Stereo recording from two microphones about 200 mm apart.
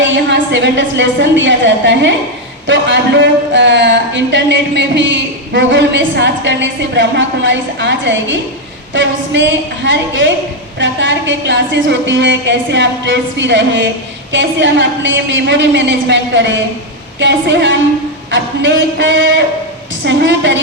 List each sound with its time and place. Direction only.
0.0 s a woman's voice: 65° right (ahead or behind)